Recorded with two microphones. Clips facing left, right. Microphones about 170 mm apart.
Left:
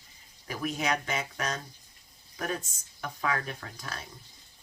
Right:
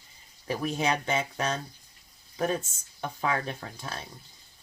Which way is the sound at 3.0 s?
25° right (ahead or behind).